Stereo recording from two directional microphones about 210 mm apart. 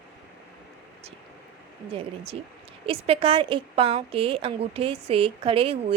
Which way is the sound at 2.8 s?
25° right (ahead or behind).